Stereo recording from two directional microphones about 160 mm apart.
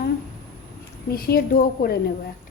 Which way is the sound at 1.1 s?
70° left (ahead or behind).